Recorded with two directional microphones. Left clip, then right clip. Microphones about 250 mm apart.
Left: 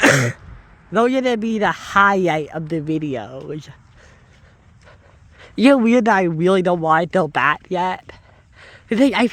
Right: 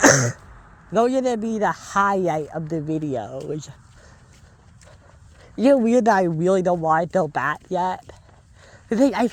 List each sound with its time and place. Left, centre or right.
0.0 s speech: left
3.1 s speech: centre
5.4 s speech: left